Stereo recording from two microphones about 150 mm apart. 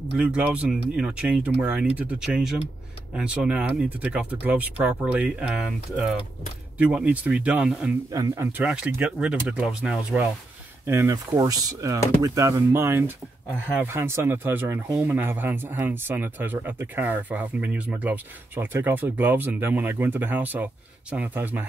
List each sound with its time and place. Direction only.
0.1 s speech: 10° right (ahead or behind)
8.1 s speech: 20° right (ahead or behind); by 10.2 s 5° right (ahead or behind)
10.9 s speech: 20° right (ahead or behind)